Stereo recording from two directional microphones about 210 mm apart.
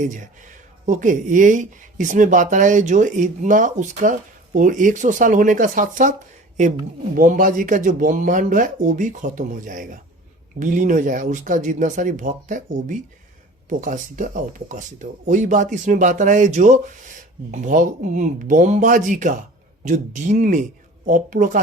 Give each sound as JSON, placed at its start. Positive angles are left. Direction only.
{"t": 0.9, "sound": "speech", "side_deg": -40}